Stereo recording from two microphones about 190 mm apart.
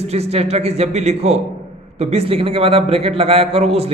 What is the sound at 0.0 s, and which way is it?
A man's voice, 35° right (ahead or behind).